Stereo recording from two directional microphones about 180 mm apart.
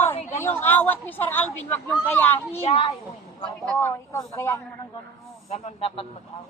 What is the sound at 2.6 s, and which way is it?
Speech, 35° left (ahead or behind).